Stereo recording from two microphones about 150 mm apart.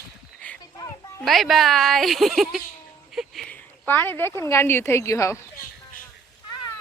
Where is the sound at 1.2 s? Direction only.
Centre (ahead or behind); by 5.4 s 20° left (ahead or behind).